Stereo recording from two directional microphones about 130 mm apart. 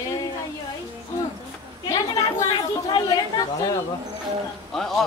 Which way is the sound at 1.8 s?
25° left (ahead or behind).